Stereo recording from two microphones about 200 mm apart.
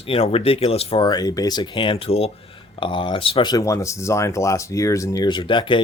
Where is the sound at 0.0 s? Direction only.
30° left (ahead or behind).